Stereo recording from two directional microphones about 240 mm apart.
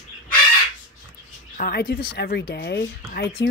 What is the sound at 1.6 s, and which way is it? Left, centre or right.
Speech, left.